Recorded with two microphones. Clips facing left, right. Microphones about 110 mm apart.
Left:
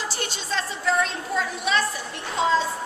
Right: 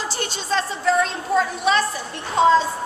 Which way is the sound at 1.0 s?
40° right (ahead or behind).